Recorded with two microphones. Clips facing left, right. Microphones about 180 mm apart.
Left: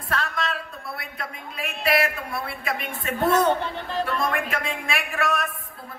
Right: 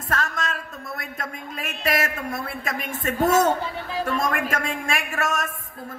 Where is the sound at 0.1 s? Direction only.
45° right (ahead or behind).